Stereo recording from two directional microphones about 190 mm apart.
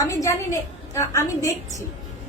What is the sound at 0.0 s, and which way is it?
A woman's voice, 15° left (ahead or behind).